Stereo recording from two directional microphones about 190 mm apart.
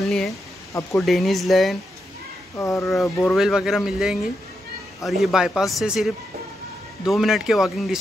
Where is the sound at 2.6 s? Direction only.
15° left (ahead or behind).